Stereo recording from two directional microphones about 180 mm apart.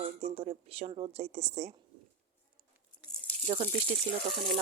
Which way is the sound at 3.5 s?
35° right (ahead or behind).